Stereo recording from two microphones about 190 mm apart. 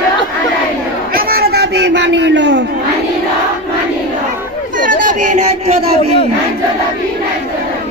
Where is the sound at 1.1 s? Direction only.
50° right (ahead or behind); by 2.6 s 70° right (ahead or behind).